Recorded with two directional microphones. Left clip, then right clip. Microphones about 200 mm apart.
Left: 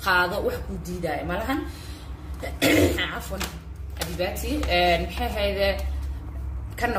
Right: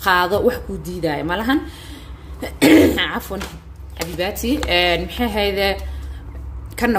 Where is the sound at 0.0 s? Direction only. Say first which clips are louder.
Right 6 dB; 40° right (ahead or behind).